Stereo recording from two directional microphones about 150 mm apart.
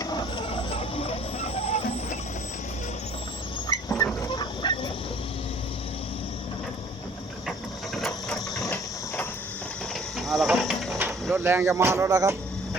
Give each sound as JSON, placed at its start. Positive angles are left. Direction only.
{"t": 0.0, "sound": "vehicle", "side_deg": 30}
{"t": 3.7, "sound": "fowl", "side_deg": 25}
{"t": 7.9, "sound": "ratchet", "side_deg": 0}
{"t": 10.2, "sound": "a sound", "side_deg": 0}
{"t": 11.4, "sound": "speech", "side_deg": -15}